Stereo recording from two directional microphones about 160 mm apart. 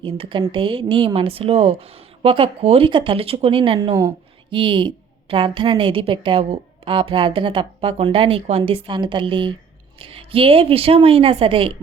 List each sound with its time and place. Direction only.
0.0 s a woman's voice: 30° right (ahead or behind)